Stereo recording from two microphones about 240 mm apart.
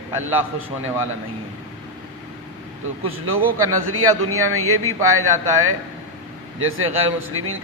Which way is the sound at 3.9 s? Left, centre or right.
Right.